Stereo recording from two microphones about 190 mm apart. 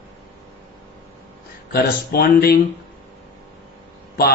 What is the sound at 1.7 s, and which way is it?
Speech, 55° left (ahead or behind).